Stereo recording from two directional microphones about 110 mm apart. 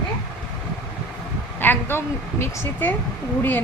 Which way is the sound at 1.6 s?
20° left (ahead or behind).